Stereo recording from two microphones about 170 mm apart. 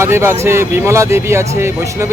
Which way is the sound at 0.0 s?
15° right (ahead or behind).